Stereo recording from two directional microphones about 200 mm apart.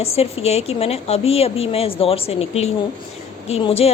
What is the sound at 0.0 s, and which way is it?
A woman's voice, 30° left (ahead or behind).